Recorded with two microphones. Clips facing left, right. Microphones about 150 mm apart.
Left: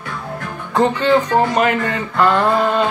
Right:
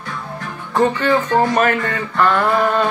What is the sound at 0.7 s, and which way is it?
Speech, 20° left (ahead or behind).